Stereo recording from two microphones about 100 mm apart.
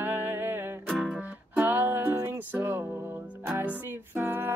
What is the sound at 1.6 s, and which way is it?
Music, 20° right (ahead or behind).